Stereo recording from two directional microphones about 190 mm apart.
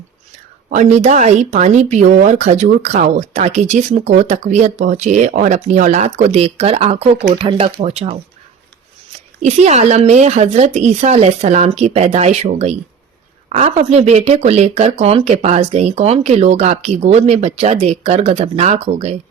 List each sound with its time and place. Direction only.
0.7 s speech: 35° right (ahead or behind)
9.4 s speech: 35° right (ahead or behind)